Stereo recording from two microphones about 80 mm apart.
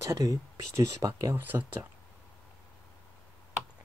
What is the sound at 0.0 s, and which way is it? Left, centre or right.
Speech, right.